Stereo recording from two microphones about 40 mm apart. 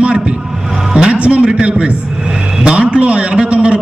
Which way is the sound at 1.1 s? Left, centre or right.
Right.